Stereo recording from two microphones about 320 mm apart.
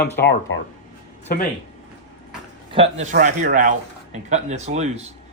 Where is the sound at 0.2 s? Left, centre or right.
Left.